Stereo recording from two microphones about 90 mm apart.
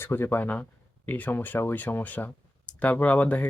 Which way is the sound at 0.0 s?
25° left (ahead or behind).